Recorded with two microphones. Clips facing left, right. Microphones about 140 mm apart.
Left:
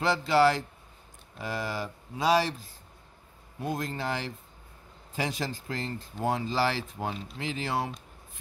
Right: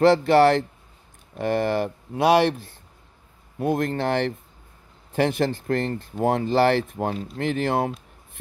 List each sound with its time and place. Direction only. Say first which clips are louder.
0.0 s speech: right 8 dB; 60° right (ahead or behind)